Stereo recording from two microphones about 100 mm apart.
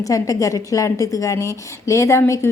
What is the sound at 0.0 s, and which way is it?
A woman's voice, 35° left (ahead or behind).